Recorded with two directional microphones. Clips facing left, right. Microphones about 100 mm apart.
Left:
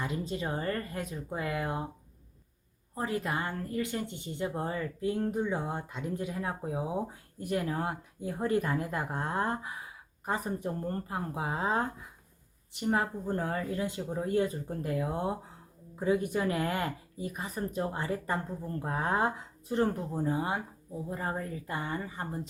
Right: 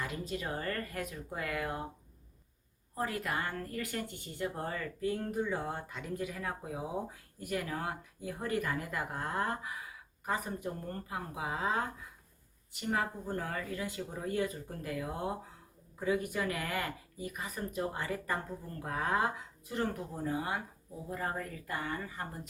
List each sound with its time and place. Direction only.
0.0 s speech: 25° left (ahead or behind)
2.9 s speech: 25° left (ahead or behind)
13.3 s speech: 25° left (ahead or behind)